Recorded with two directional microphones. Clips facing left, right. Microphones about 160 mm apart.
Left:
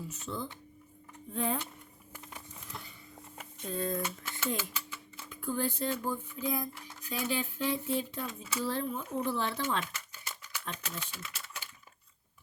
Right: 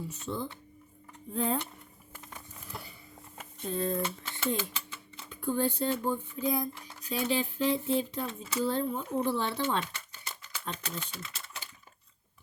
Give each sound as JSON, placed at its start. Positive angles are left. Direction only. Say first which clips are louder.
{"t": 0.1, "sound": "speech", "louder": "right 3 dB", "side_deg": -30}
{"t": 2.7, "sound": "a sound", "louder": "right 3 dB", "side_deg": -5}
{"t": 3.3, "sound": "speech", "louder": "right 3 dB", "side_deg": -30}